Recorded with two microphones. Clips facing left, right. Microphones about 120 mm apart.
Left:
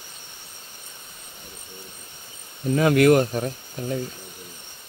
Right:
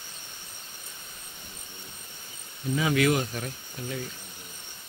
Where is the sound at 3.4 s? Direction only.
35° left (ahead or behind).